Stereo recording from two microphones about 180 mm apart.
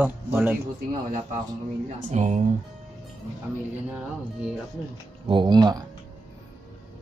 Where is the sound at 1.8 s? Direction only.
40° right (ahead or behind).